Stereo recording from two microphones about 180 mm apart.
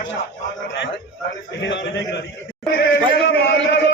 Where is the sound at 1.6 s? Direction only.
80° left.